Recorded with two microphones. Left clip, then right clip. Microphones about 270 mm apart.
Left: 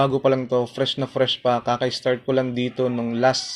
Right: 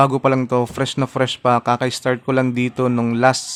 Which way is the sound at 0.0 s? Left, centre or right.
Right.